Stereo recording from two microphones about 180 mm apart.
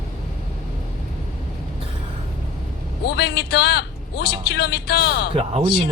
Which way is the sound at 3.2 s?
65° left (ahead or behind).